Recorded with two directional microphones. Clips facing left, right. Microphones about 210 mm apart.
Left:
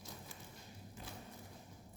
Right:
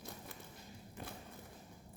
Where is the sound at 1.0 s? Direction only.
60° right (ahead or behind).